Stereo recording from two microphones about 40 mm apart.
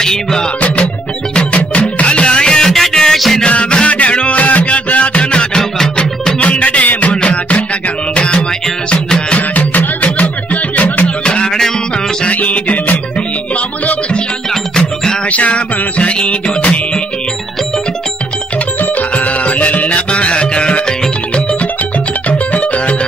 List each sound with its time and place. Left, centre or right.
0.0 s music: centre
1.3 s music: left
2.4 s music: centre
3.4 s music: left
9.3 s music: left
11.2 s music: left
12.3 s music: left
15.3 s music: left
18.8 s music: left
22.5 s music: left